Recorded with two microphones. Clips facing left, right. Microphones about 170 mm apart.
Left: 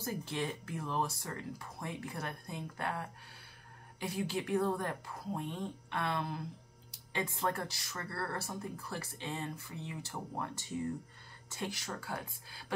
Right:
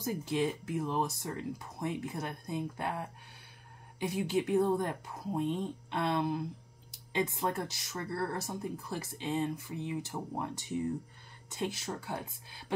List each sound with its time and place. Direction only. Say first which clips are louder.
0.0 s speech: right 6 dB; 20° right (ahead or behind)